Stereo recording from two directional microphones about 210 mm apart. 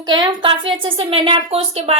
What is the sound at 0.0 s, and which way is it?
A woman's voice, 20° right (ahead or behind).